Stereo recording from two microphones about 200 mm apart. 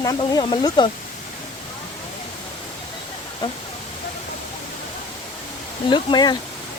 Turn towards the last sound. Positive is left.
turn(degrees=20)  # may be behind; listen again after turning